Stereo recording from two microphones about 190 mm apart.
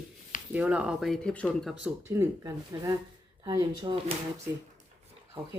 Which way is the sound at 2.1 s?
15° right (ahead or behind).